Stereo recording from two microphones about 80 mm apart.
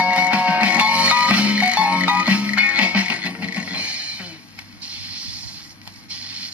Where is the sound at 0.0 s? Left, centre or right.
Centre.